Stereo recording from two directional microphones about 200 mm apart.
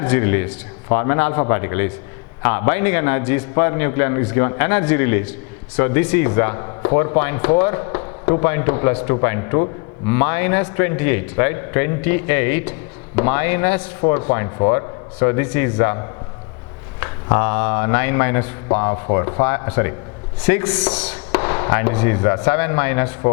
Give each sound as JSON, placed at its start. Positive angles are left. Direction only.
{"t": 0.0, "sound": "a man's voice", "side_deg": 15}